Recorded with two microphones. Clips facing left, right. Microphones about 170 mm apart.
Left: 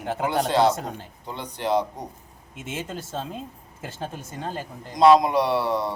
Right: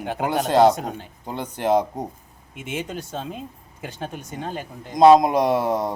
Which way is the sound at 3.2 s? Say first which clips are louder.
Right 1 dB; 10° right (ahead or behind).